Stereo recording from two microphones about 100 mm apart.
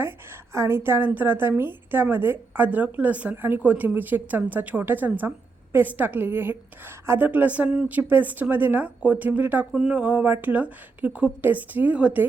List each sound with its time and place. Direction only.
0.5 s a woman's voice: 25° right (ahead or behind)
9.7 s speech: 5° right (ahead or behind)
10.0 s a woman's voice: 15° right (ahead or behind)